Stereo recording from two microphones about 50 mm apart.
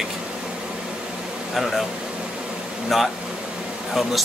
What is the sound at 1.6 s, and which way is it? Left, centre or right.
Speech, centre.